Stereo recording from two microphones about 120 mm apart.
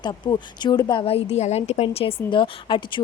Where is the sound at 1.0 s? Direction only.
55° left (ahead or behind).